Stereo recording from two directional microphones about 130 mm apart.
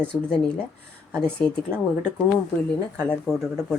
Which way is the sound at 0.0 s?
10° left (ahead or behind).